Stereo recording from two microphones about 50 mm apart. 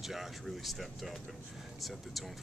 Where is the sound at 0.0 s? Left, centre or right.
Centre.